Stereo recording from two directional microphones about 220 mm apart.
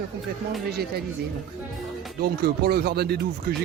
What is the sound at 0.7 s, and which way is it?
Speech, 45° right (ahead or behind).